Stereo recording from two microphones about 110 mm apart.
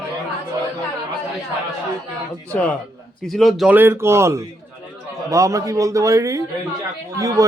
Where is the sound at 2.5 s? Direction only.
15° left (ahead or behind).